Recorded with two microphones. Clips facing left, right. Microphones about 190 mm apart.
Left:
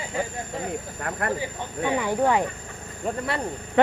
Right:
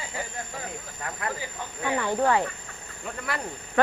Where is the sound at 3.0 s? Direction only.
35° left (ahead or behind).